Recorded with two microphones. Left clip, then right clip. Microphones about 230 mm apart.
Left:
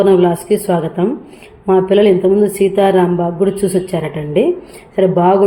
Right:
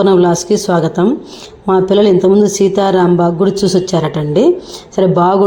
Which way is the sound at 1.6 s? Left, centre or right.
Right.